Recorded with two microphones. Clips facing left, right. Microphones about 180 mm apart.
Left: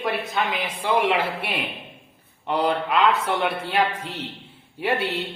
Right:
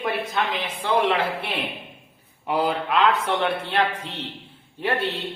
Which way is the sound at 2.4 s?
5° right (ahead or behind).